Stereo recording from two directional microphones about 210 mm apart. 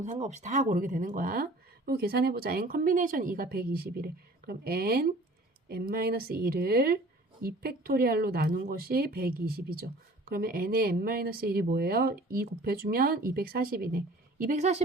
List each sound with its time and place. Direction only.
0.0 s speech: 35° right (ahead or behind)